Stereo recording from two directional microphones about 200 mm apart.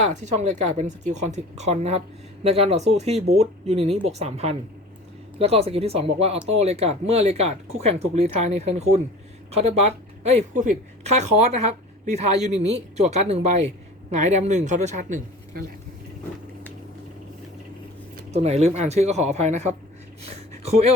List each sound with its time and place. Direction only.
0.0 s speech: 35° right (ahead or behind)
18.3 s speech: 35° right (ahead or behind)
20.2 s a sound: 30° right (ahead or behind)